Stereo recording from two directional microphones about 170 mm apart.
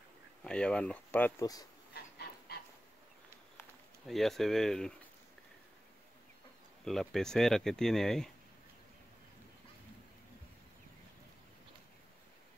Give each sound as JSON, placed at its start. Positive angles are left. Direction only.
{"t": 0.4, "sound": "speech", "side_deg": 5}
{"t": 1.4, "sound": "speech", "side_deg": 20}
{"t": 2.1, "sound": "dog", "side_deg": 65}
{"t": 4.1, "sound": "speech", "side_deg": 0}
{"t": 6.8, "sound": "speech", "side_deg": 0}